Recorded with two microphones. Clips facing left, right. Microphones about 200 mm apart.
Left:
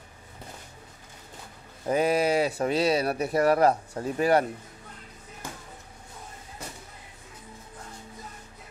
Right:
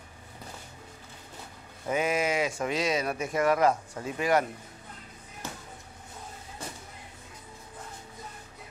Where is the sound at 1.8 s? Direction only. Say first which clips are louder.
Left 4 dB; 35° left (ahead or behind).